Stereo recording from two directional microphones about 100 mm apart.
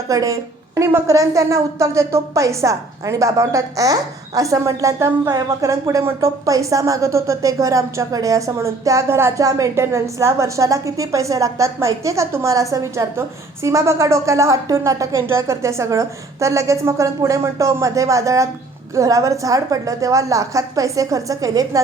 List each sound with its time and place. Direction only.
0.1 s a woman's voice: 35° right (ahead or behind)